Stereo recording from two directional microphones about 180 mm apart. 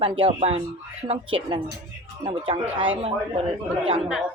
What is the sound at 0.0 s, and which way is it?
A man's voice, 35° right (ahead or behind).